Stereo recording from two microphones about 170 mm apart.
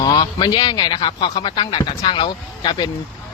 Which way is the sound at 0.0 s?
25° left (ahead or behind).